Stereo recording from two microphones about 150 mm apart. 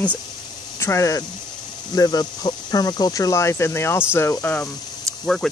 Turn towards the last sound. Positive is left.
turn(degrees=0)  # may be behind; listen again after turning